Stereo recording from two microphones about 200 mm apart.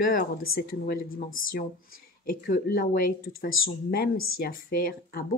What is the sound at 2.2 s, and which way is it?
Speech, 45° left (ahead or behind).